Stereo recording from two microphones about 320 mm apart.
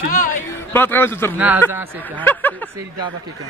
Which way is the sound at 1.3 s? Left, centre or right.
Centre.